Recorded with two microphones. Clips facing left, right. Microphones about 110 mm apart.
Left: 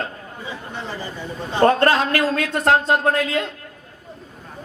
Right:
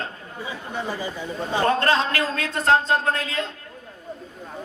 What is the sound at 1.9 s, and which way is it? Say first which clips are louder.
Speech: left 3 dB; 25° right (ahead or behind).